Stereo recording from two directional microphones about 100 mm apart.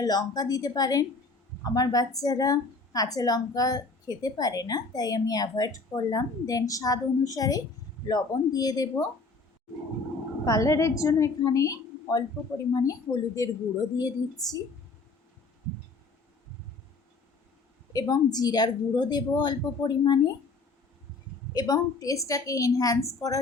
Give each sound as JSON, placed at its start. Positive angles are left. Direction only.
{"t": 0.0, "sound": "a woman's voice", "side_deg": 40}
{"t": 10.4, "sound": "a woman's voice", "side_deg": 35}
{"t": 17.9, "sound": "a woman's voice", "side_deg": 40}
{"t": 21.5, "sound": "a woman's voice", "side_deg": 40}